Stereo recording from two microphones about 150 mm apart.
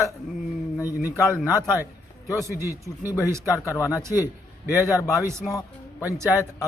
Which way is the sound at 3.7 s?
20° left (ahead or behind).